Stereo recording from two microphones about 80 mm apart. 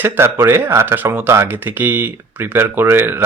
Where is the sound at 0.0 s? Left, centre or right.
Right.